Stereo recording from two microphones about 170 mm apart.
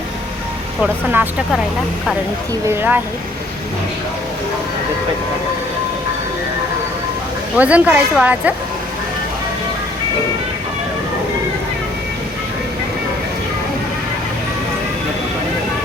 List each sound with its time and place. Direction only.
0.8 s speech: 10° right (ahead or behind)
2.6 s speech: 10° right (ahead or behind)
7.5 s speech: 10° right (ahead or behind)